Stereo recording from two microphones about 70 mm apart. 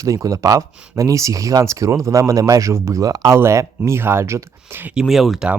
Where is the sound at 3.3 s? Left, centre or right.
Right.